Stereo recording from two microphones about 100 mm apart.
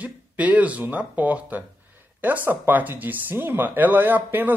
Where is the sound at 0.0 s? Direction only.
15° right (ahead or behind).